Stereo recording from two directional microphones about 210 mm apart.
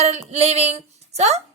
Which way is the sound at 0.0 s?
30° right (ahead or behind).